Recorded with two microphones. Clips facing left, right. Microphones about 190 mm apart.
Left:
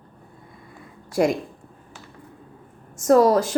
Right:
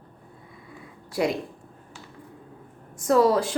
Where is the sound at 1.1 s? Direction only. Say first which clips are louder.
Left 5 dB; 45° left (ahead or behind).